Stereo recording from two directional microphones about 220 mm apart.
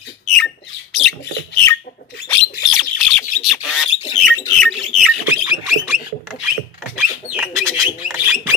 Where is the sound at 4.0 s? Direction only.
25° left (ahead or behind).